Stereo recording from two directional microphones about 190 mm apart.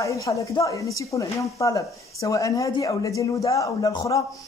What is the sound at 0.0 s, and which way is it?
A man's voice, 15° left (ahead or behind).